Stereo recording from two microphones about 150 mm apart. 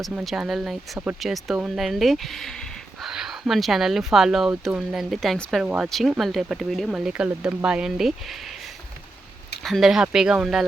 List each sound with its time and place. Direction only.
0.0 s speech: 5° right (ahead or behind)
9.6 s speech: centre (ahead or behind)